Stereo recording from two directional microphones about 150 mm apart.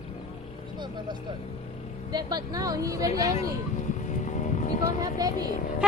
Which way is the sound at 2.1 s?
25° right (ahead or behind).